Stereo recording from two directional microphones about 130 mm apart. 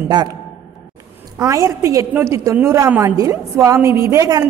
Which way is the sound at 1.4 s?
25° right (ahead or behind).